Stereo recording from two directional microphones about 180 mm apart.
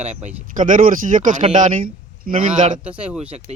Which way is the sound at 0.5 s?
45° right (ahead or behind).